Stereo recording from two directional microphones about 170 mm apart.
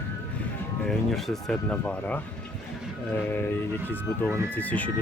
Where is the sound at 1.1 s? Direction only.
Centre (ahead or behind).